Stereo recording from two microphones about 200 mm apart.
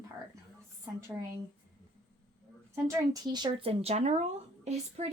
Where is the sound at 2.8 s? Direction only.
20° right (ahead or behind).